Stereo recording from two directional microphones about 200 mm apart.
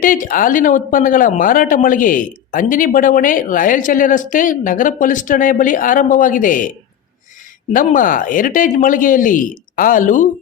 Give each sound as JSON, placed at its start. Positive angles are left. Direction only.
{"t": 0.0, "sound": "speech", "side_deg": 40}
{"t": 7.7, "sound": "speech", "side_deg": 40}